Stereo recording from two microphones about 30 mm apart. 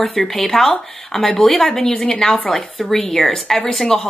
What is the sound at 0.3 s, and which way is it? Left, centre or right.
Speech, centre.